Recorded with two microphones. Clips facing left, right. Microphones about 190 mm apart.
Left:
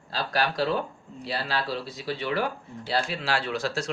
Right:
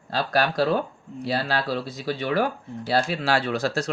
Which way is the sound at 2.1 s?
45° right (ahead or behind).